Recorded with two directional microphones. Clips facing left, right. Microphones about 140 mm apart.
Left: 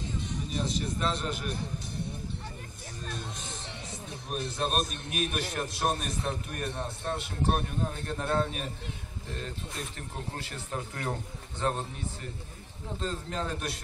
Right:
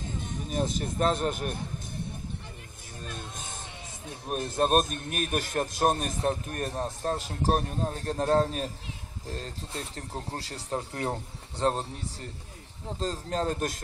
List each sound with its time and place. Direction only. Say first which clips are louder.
0.3 s speech: right 4 dB; 50° right (ahead or behind)
3.1 s music: left 1 dB; 50° right (ahead or behind)
4.3 s a man's voice: right 7 dB; 45° right (ahead or behind)